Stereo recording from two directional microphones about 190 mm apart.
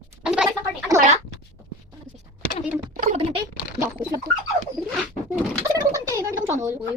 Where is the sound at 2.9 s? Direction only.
45° right (ahead or behind).